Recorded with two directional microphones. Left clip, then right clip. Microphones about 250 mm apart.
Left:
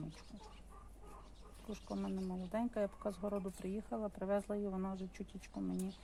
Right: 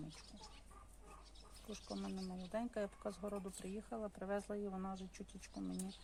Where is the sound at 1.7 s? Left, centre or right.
Centre.